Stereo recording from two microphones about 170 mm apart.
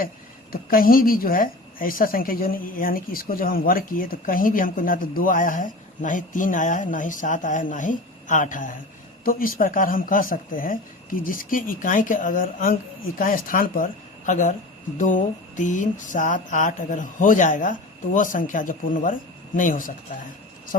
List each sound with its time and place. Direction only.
0.5 s a woman's voice: 60° left (ahead or behind)
6.9 s mantra: 50° left (ahead or behind)
9.2 s a woman's voice: 55° left (ahead or behind)
14.3 s mantra: 50° left (ahead or behind)